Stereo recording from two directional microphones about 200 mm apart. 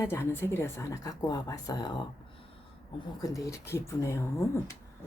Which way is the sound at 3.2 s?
15° left (ahead or behind).